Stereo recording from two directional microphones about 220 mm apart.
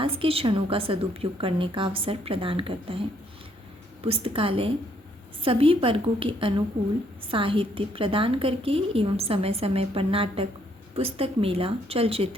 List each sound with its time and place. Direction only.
0.0 s a woman's voice: 25° right (ahead or behind)
4.0 s a woman's voice: 25° right (ahead or behind)